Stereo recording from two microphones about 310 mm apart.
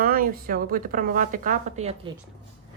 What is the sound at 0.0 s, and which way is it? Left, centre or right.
A woman's voice, right.